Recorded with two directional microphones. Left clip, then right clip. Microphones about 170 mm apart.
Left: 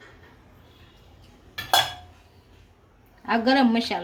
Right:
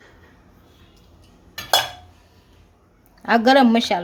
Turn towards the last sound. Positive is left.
turn(degrees=-40)  # may be behind; listen again after turning